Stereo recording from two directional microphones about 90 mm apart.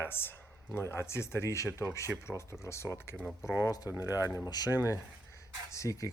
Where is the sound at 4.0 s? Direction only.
40° left (ahead or behind).